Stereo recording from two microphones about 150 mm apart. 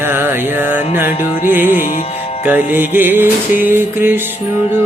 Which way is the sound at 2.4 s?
10° right (ahead or behind).